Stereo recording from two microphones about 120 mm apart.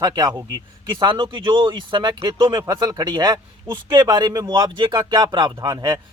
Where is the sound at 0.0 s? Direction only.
35° right (ahead or behind).